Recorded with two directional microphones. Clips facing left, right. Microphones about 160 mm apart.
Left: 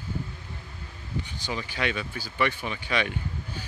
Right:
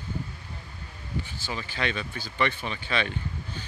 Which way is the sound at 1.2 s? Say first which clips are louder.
Left 2 dB; 15° left (ahead or behind).